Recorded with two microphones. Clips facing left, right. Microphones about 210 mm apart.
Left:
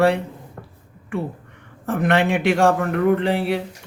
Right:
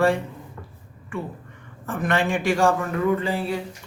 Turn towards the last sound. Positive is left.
turn(degrees=70)  # may be behind; listen again after turning